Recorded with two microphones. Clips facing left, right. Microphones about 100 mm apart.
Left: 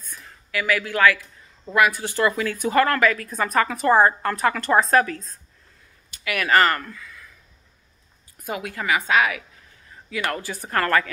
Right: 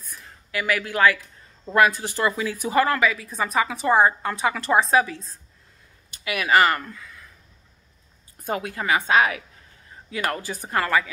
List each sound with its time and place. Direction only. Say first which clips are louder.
0.5 s speech: left 1 dB; 25° right (ahead or behind)
2.9 s a woman's voice: left 2 dB; 5° right (ahead or behind)
6.2 s speech: even; 20° right (ahead or behind)
8.5 s speech: right 1 dB; 30° right (ahead or behind); by 11.1 s 10° right (ahead or behind)